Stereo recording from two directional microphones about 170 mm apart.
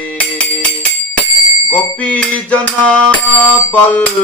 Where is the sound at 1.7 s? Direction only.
10° left (ahead or behind).